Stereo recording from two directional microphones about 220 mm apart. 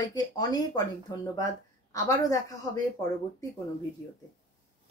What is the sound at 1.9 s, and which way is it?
Speech, 15° left (ahead or behind).